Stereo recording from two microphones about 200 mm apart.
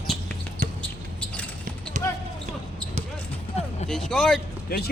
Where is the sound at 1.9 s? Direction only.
40° right (ahead or behind).